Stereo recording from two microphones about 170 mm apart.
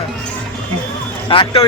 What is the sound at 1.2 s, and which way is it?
Speech, 30° left (ahead or behind).